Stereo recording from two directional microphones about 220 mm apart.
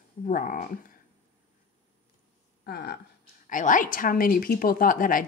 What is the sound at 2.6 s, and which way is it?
Speech, 45° left (ahead or behind).